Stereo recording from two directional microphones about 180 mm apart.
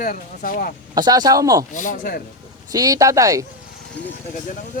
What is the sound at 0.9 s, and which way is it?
Speech, 20° right (ahead or behind).